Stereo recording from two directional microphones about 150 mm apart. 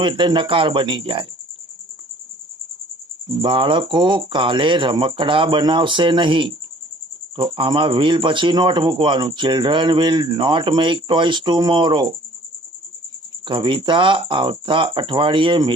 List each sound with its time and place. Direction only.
0.0 s speech: 30° right (ahead or behind)
3.2 s speech: 35° right (ahead or behind)
13.4 s speech: 35° right (ahead or behind)